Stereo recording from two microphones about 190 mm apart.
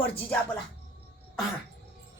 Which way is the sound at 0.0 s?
10° left (ahead or behind).